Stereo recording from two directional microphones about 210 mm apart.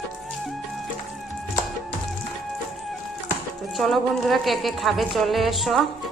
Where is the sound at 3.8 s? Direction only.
Centre (ahead or behind).